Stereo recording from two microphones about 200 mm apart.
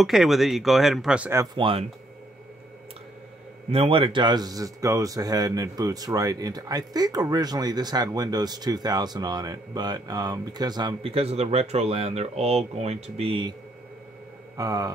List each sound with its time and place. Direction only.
0.0 s speech: centre (ahead or behind); by 1.9 s 25° right (ahead or behind)
3.7 s speech: 25° right (ahead or behind)
14.6 s speech: 15° right (ahead or behind)